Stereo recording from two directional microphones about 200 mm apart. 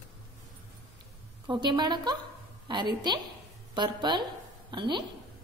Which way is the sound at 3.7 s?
20° right (ahead or behind).